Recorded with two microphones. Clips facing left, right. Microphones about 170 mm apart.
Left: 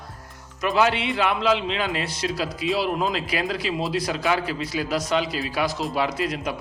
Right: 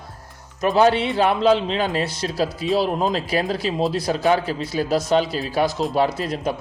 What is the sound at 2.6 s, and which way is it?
Speech, centre (ahead or behind).